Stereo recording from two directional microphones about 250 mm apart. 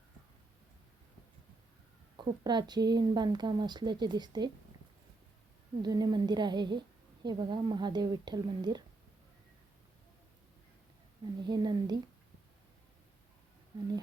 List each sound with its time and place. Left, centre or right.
2.1 s speech: centre
5.8 s speech: centre
11.4 s speech: centre
13.7 s speech: centre